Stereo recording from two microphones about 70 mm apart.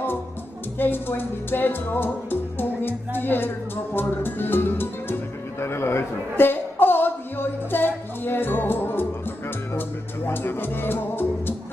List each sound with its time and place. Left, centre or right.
0.7 s music: left
9.8 s speech: left